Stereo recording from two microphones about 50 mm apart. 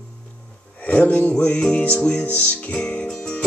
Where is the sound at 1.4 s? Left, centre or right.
Left.